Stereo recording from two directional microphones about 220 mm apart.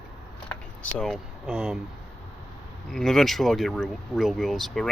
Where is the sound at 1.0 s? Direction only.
Centre (ahead or behind).